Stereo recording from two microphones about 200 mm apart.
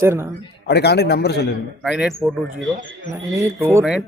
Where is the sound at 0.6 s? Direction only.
55° left (ahead or behind).